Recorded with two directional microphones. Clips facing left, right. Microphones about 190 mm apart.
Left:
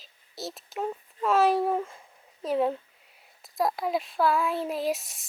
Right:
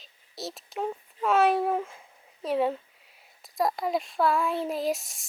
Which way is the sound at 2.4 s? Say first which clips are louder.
Even; centre (ahead or behind).